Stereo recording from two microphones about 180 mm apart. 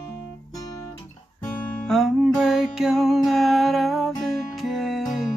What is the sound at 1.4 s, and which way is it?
Music, 10° left (ahead or behind).